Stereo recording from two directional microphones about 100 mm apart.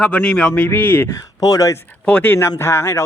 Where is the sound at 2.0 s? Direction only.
15° left (ahead or behind).